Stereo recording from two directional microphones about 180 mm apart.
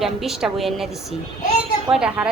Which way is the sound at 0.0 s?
Centre (ahead or behind).